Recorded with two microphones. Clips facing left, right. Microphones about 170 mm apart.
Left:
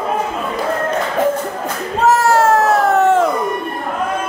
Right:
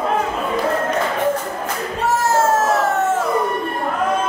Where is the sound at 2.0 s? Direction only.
70° left (ahead or behind).